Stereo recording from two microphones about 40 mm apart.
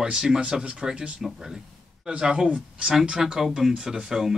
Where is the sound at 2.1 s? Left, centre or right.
Right.